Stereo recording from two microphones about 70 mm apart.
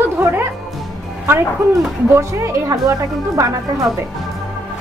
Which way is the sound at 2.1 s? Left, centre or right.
Right.